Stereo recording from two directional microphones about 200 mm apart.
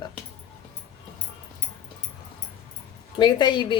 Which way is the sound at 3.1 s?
20° left (ahead or behind).